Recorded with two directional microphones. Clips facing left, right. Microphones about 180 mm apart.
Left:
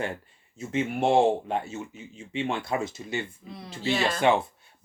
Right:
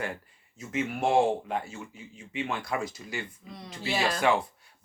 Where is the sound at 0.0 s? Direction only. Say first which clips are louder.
Left 3 dB; 25° left (ahead or behind).